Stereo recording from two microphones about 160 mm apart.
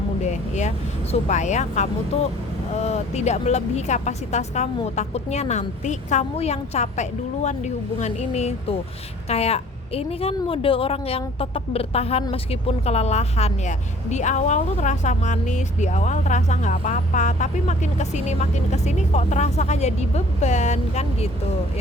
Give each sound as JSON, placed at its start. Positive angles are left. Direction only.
{"t": 0.3, "sound": "vehicle", "side_deg": 45}
{"t": 1.3, "sound": "a woman's voice", "side_deg": 50}